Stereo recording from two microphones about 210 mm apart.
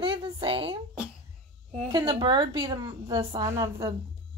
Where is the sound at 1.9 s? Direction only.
20° right (ahead or behind).